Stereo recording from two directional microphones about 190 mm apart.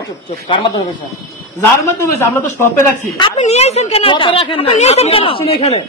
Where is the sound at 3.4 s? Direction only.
35° left (ahead or behind).